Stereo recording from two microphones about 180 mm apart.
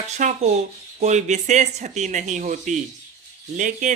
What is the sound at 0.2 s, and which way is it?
Speech, 40° right (ahead or behind).